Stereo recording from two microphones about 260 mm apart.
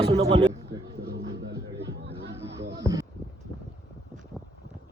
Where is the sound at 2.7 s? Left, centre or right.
Centre.